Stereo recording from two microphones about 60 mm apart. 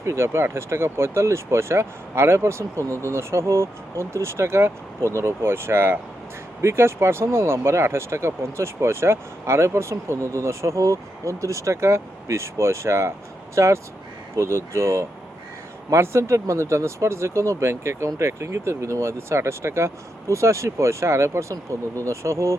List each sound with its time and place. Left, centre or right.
0.0 s speech: right